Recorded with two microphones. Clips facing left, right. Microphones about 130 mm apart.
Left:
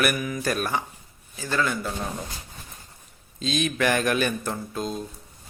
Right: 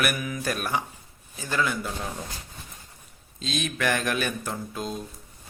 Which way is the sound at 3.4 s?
Centre (ahead or behind).